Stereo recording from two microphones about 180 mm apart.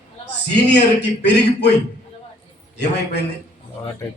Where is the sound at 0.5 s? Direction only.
70° left (ahead or behind).